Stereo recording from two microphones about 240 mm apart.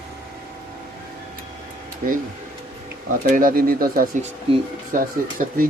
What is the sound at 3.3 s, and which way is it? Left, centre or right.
Speech, right.